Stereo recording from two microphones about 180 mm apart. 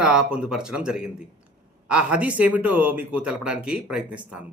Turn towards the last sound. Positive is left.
turn(degrees=-5)  # may be behind; listen again after turning